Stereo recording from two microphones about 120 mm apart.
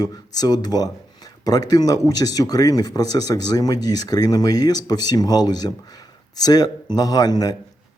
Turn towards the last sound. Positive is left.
turn(degrees=30)  # may be behind; listen again after turning